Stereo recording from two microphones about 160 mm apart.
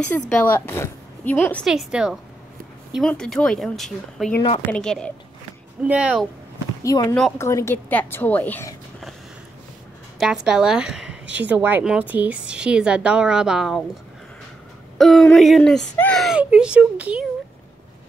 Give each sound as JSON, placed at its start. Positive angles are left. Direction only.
{"t": 0.3, "sound": "a woman's voice", "side_deg": 10}
{"t": 1.7, "sound": "a woman's voice", "side_deg": -5}
{"t": 5.9, "sound": "a woman's voice", "side_deg": -10}
{"t": 6.8, "sound": "a woman's voice", "side_deg": 20}
{"t": 10.1, "sound": "a woman's voice", "side_deg": -5}
{"t": 15.0, "sound": "a woman's voice", "side_deg": 5}